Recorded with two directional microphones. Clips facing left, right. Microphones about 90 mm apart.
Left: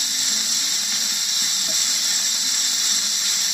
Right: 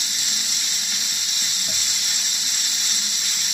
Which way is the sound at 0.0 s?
35° left (ahead or behind).